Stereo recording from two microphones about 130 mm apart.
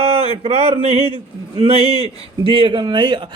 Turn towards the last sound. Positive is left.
turn(degrees=-40)  # may be behind; listen again after turning